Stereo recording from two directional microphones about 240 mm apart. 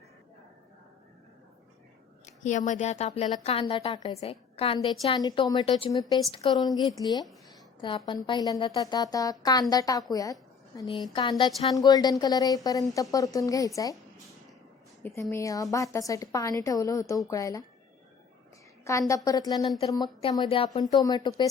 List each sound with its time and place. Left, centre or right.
2.2 s a woman's voice: left; by 13.9 s centre
13.9 s a sound: centre
15.0 s speech: centre
18.9 s a woman's voice: centre